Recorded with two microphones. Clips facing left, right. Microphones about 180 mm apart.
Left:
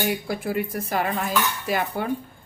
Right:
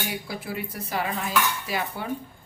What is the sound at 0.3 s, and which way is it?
A woman's voice, 50° left (ahead or behind).